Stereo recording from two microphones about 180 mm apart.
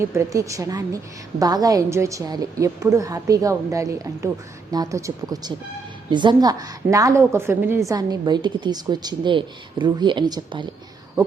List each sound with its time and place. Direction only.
0.0 s a woman's voice: 15° right (ahead or behind)